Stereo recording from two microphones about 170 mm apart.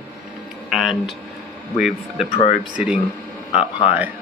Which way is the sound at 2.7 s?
5° right (ahead or behind).